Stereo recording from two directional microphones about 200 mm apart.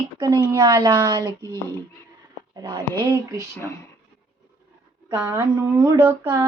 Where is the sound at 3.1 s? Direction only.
15° right (ahead or behind).